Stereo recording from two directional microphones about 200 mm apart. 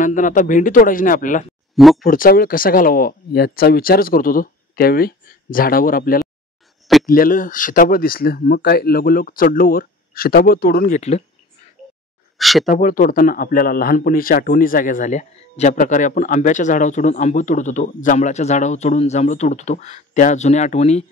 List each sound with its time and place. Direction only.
0.0 s a man's voice: 40° left (ahead or behind)
1.8 s speech: centre (ahead or behind)
2.0 s speech: 45° left (ahead or behind)
12.4 s speech: centre (ahead or behind)
12.6 s a man's voice: 45° left (ahead or behind)